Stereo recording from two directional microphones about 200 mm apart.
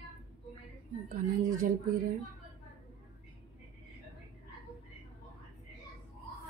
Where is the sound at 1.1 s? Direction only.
40° right (ahead or behind).